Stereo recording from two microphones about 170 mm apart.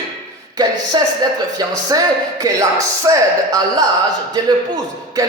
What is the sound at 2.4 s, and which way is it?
Speech, 20° right (ahead or behind).